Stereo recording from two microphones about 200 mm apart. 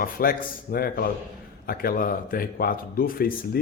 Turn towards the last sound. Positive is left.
turn(degrees=45)  # may be behind; listen again after turning